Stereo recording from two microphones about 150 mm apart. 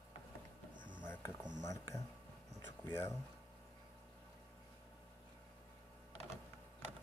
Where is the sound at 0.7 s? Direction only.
30° right (ahead or behind).